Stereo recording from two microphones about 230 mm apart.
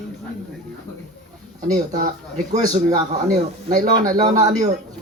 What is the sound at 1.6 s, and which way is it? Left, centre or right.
A man's voice, right.